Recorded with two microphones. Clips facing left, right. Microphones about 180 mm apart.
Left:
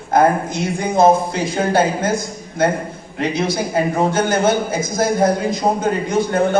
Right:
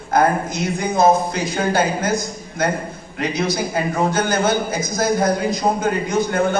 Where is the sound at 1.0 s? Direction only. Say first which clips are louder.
Left 2 dB; 25° left (ahead or behind).